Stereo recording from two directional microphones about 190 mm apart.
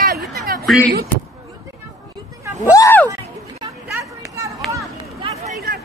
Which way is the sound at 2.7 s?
15° left (ahead or behind).